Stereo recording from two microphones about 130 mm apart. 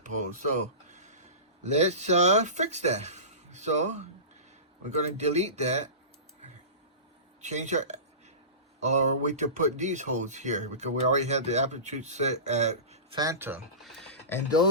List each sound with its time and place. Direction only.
0.0 s speech: 70° right (ahead or behind)
7.4 s speech: 65° right (ahead or behind)
13.1 s speech: 25° right (ahead or behind)
13.8 s speech: 5° left (ahead or behind)